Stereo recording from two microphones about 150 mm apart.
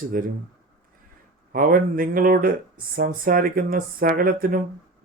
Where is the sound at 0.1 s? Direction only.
70° right (ahead or behind).